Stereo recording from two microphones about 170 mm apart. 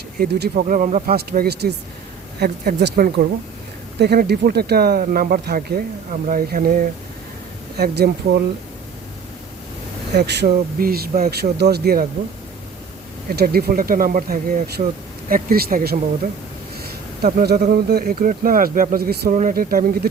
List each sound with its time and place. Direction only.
0.2 s speech: 65° right (ahead or behind)
0.6 s speech: 50° right (ahead or behind)
1.1 s speech: 65° right (ahead or behind)
7.8 s speech: 70° right (ahead or behind)
10.2 s speech: 75° right (ahead or behind)
13.3 s speech: 65° right (ahead or behind)
19.3 s speech: 50° right (ahead or behind)